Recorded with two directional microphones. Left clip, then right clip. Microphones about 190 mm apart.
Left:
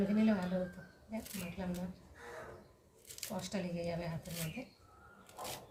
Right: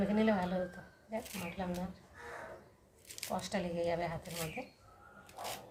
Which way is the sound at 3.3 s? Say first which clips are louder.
Right 5 dB; 25° right (ahead or behind).